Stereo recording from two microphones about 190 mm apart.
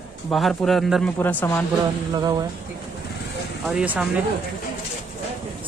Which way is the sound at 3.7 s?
5° right (ahead or behind).